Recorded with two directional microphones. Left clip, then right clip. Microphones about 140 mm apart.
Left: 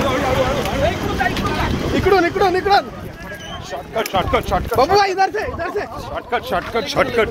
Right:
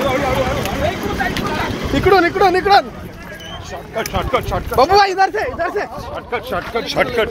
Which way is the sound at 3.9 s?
60° left (ahead or behind).